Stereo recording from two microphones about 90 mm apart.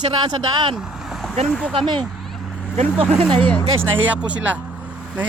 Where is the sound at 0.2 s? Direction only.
55° right (ahead or behind).